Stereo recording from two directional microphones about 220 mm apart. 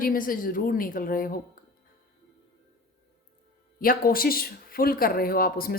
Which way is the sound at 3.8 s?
40° left (ahead or behind).